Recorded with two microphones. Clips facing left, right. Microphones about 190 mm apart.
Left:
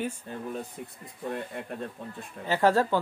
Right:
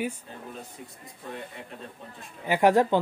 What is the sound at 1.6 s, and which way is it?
Speech, 55° left (ahead or behind).